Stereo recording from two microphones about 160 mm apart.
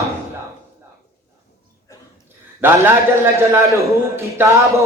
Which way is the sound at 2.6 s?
15° right (ahead or behind).